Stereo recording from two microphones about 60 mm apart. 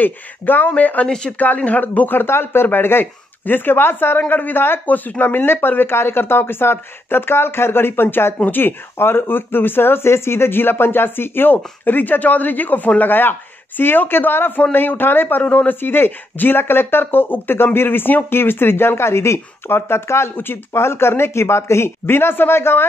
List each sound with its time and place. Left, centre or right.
0.0 s speech: left
1.0 s speech: centre
1.4 s speech: left
4.2 s speech: left